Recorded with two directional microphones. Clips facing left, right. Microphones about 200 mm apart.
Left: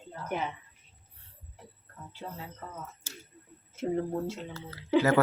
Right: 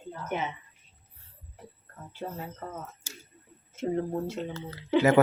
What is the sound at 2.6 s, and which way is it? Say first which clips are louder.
Speech: right 6 dB; 50° right (ahead or behind).